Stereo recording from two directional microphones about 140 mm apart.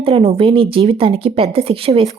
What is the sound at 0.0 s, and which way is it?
Speech, 45° right (ahead or behind).